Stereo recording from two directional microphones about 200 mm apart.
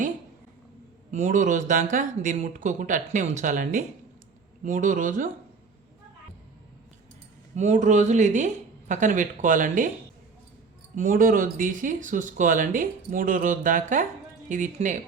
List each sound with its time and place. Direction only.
1.1 s speech: 40° right (ahead or behind)
7.5 s speech: 35° right (ahead or behind)
10.9 s speech: 40° right (ahead or behind)